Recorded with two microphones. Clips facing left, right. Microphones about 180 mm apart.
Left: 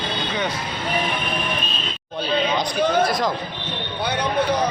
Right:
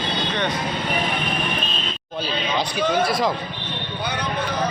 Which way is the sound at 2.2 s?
5° right (ahead or behind).